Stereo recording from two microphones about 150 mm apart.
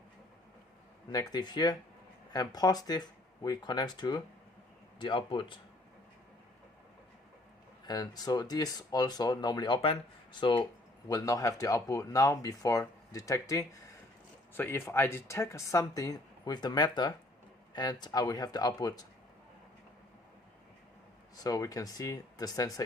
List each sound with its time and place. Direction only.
1.1 s speech: 25° left (ahead or behind)
7.9 s speech: 30° left (ahead or behind)
21.3 s speech: 25° left (ahead or behind)